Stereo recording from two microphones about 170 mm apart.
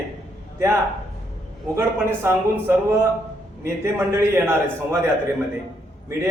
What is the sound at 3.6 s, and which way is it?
Speech, 15° right (ahead or behind).